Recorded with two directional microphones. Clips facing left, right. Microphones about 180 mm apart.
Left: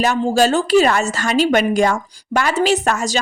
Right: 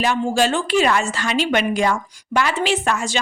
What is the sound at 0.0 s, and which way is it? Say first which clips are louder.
A woman's voice: left 3 dB; 40° left (ahead or behind).